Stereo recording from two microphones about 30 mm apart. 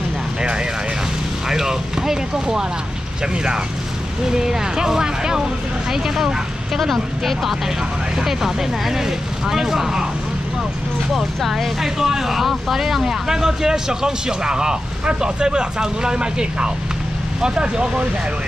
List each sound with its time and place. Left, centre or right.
1.5 s vehicle: centre
4.3 s speech: centre
6.8 s speech: centre
8.2 s speech: centre
11.1 s speech: centre; by 18.0 s right